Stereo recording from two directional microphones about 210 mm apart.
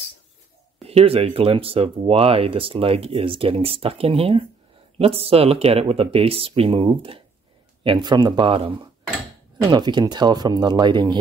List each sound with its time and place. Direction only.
0.8 s speech: 30° right (ahead or behind)